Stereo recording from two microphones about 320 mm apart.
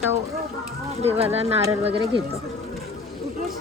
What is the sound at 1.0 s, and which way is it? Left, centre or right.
Speech, centre.